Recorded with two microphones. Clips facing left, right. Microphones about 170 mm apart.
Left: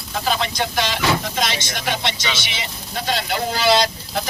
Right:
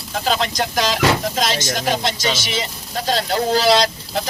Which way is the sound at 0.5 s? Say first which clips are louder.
Right 2 dB; 40° right (ahead or behind).